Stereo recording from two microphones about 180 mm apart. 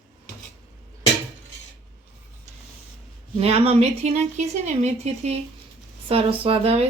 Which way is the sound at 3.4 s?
35° right (ahead or behind).